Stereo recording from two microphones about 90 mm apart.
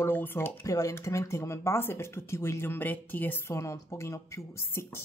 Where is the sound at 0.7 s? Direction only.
40° left (ahead or behind).